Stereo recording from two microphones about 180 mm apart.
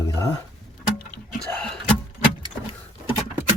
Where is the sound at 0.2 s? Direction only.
15° left (ahead or behind).